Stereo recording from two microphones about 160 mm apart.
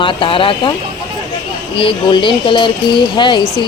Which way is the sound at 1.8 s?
30° left (ahead or behind).